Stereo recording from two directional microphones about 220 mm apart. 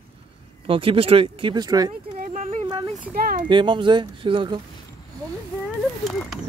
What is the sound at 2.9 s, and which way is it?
Speech, 40° right (ahead or behind).